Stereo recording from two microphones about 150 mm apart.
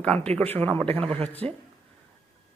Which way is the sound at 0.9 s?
40° right (ahead or behind).